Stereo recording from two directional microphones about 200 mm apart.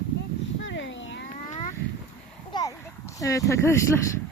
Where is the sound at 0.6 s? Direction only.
65° left (ahead or behind).